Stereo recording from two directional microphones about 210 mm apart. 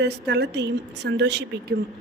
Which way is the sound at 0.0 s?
55° right (ahead or behind).